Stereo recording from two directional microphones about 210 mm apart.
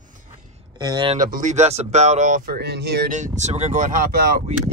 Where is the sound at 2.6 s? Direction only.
50° right (ahead or behind).